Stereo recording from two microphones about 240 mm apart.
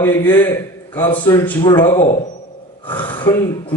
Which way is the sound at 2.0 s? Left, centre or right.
Left.